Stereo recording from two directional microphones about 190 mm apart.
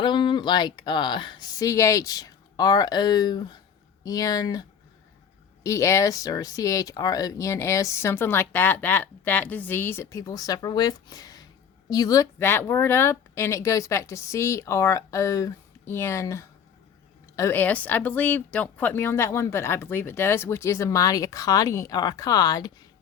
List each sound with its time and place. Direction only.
0.0 s speech: 25° left (ahead or behind)
5.6 s speech: 15° left (ahead or behind)